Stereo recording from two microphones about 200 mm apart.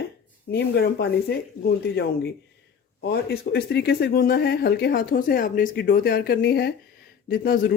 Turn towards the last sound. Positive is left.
turn(degrees=45)  # may be behind; listen again after turning